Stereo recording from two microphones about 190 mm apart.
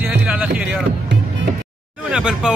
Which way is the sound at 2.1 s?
5° right (ahead or behind).